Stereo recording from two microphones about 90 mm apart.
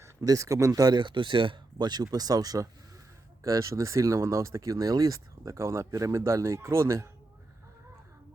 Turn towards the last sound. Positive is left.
turn(degrees=-30)  # may be behind; listen again after turning